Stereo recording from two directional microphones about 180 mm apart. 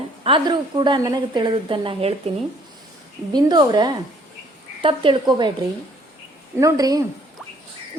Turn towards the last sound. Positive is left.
turn(degrees=-20)  # may be behind; listen again after turning